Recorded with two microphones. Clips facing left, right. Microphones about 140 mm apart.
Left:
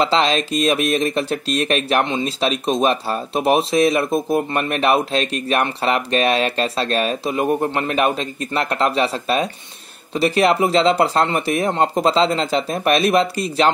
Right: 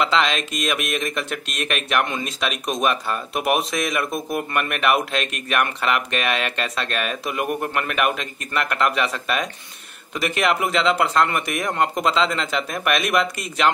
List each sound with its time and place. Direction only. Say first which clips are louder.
0.0 s speech: left 4 dB; 35° left (ahead or behind)